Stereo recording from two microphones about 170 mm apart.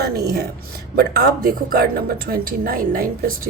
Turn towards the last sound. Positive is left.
turn(degrees=-55)  # may be behind; listen again after turning